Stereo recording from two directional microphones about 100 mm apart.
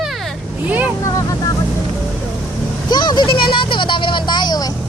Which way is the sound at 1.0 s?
35° left (ahead or behind).